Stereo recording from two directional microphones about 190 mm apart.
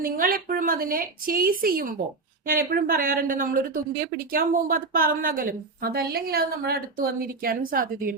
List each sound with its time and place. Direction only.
0.0 s a woman's voice: 50° right (ahead or behind)